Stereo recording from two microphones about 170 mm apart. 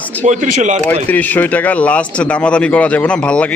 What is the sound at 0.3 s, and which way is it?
Speech, 45° right (ahead or behind).